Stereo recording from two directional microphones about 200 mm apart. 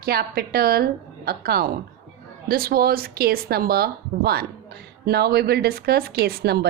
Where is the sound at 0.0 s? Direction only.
50° right (ahead or behind).